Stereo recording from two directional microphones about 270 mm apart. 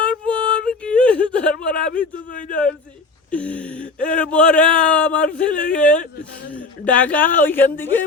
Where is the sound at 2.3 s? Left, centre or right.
Left.